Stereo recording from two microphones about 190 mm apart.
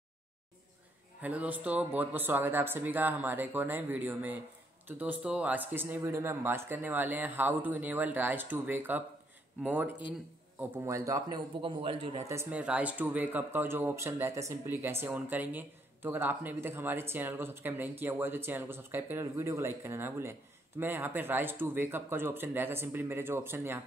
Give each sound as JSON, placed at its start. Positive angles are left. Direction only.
{"t": 1.2, "sound": "a man's voice", "side_deg": -10}
{"t": 12.3, "sound": "speech", "side_deg": -10}